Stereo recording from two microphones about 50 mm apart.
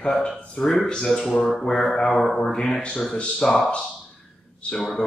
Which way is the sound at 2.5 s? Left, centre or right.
Centre.